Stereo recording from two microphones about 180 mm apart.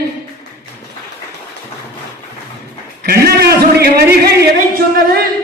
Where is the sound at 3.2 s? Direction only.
60° right (ahead or behind).